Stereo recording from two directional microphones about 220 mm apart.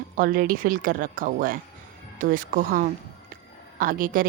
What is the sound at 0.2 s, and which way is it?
A woman's voice, 40° right (ahead or behind).